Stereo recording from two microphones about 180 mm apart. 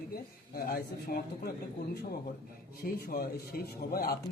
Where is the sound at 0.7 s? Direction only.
55° left (ahead or behind).